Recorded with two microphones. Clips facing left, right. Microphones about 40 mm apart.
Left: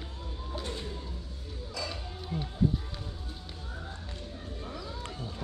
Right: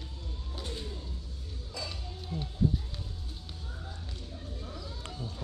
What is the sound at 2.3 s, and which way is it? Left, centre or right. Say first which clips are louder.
Music: left 2 dB; left.